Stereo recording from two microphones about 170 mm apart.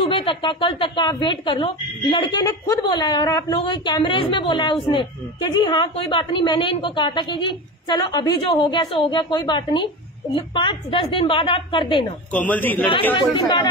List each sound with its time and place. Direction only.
0.0 s a woman's voice: 30° left (ahead or behind)
12.3 s a man's voice: 10° left (ahead or behind)
13.1 s a woman's voice: 30° left (ahead or behind)